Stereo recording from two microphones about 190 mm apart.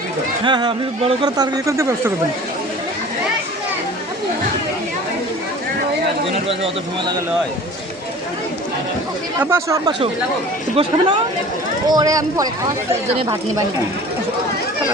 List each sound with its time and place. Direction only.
0.4 s speech: 25° right (ahead or behind)
9.4 s speech: 15° right (ahead or behind)
10.8 s speech: 25° right (ahead or behind)